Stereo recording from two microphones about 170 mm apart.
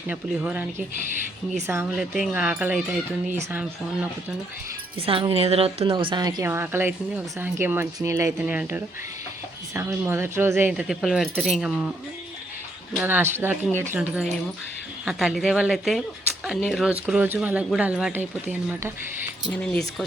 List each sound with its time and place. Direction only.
0.1 s a woman's voice: 10° right (ahead or behind)
1.8 s a woman's voice: centre (ahead or behind)
4.9 s a woman's voice: 30° right (ahead or behind); by 11.9 s 5° right (ahead or behind)
13.0 s a woman's voice: 10° right (ahead or behind)